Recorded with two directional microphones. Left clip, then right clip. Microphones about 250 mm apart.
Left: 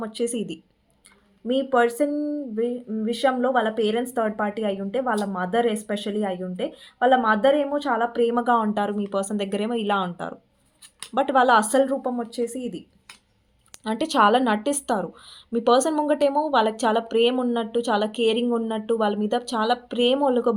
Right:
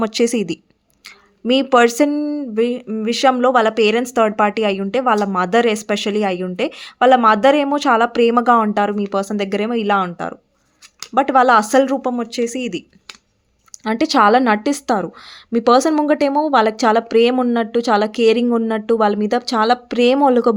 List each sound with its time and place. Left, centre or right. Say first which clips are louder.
0.0 s speech: right 10 dB; right
13.8 s a woman's voice: right 6 dB; right